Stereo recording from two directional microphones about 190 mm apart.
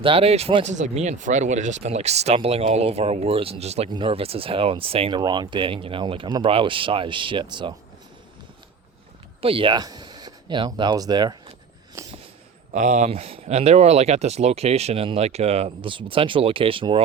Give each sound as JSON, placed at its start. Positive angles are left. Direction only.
{"t": 0.0, "sound": "speech", "side_deg": -30}
{"t": 9.4, "sound": "speech", "side_deg": -30}
{"t": 12.0, "sound": "a sound", "side_deg": -15}
{"t": 12.7, "sound": "speech", "side_deg": -40}